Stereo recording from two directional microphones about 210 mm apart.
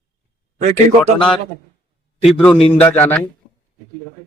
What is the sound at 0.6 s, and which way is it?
Speech, 30° right (ahead or behind).